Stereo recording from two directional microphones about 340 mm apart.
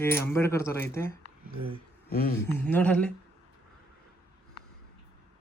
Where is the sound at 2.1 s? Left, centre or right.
Left.